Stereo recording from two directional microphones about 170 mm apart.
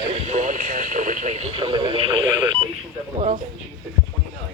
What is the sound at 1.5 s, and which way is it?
Radio, 30° right (ahead or behind).